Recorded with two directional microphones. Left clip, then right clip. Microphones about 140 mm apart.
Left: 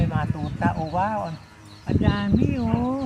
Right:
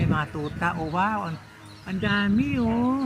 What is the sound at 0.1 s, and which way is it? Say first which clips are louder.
Speech: right 2 dB; 15° right (ahead or behind).